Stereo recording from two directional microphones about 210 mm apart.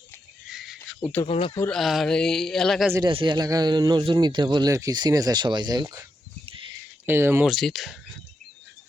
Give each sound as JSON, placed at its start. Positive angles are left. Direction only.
{"t": 0.4, "sound": "a sound", "side_deg": 0}
{"t": 1.2, "sound": "speech", "side_deg": 25}
{"t": 1.5, "sound": "speech", "side_deg": 5}
{"t": 2.9, "sound": "a man's voice", "side_deg": -20}
{"t": 7.5, "sound": "speech", "side_deg": 0}